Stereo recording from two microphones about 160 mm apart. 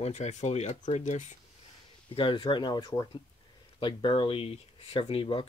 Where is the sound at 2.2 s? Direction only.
30° left (ahead or behind).